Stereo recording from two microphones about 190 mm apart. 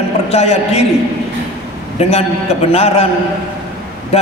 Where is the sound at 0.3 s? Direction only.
35° left (ahead or behind).